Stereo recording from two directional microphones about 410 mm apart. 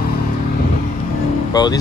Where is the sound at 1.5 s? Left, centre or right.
Centre.